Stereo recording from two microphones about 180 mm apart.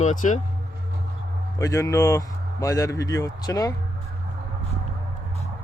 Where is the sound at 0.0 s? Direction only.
45° left (ahead or behind).